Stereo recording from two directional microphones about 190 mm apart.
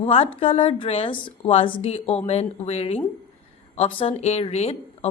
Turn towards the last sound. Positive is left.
turn(degrees=35)  # may be behind; listen again after turning